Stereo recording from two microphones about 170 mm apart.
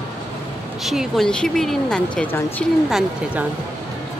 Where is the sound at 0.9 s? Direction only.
Centre (ahead or behind).